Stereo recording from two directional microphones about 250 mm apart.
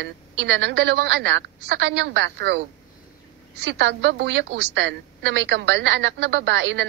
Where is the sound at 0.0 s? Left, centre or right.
Right.